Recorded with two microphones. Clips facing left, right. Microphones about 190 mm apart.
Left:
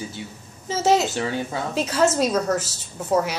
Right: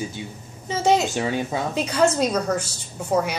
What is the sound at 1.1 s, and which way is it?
Speech, 15° right (ahead or behind).